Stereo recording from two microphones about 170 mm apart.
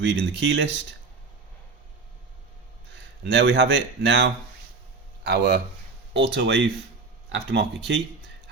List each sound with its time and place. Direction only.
0.0 s speech: 90° right
3.2 s speech: 90° right
5.2 s speech: 75° right (ahead or behind)
6.1 s speech: 90° right